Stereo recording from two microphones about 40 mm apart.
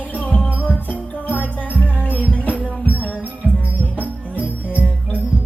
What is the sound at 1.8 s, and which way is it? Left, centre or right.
Music, left.